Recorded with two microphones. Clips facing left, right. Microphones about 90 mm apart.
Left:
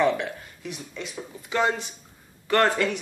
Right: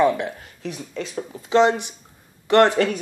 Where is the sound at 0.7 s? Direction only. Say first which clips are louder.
Right 6 dB; 35° right (ahead or behind).